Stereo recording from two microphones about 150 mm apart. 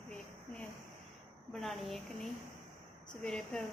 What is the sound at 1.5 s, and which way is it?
A woman's voice, centre (ahead or behind).